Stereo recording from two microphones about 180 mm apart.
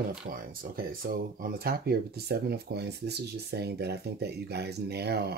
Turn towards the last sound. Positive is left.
turn(degrees=-65)  # may be behind; listen again after turning